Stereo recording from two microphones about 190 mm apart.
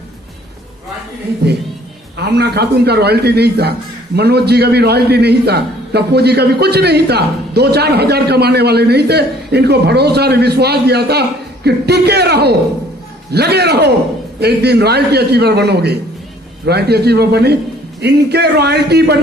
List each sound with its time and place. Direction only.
2.1 s a man's voice: 60° right (ahead or behind)